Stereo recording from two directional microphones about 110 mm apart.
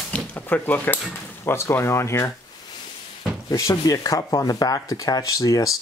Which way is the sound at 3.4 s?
30° left (ahead or behind).